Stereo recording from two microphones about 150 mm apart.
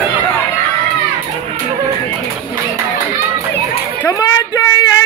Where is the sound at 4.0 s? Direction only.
20° left (ahead or behind).